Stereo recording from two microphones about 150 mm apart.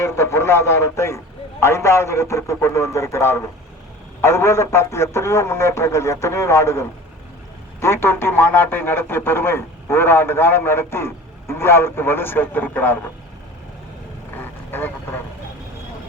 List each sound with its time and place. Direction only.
0.0 s a man's voice: 20° left (ahead or behind)
14.3 s vehicle: 15° left (ahead or behind)